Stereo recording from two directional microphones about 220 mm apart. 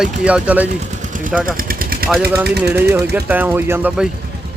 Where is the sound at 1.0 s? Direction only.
35° right (ahead or behind).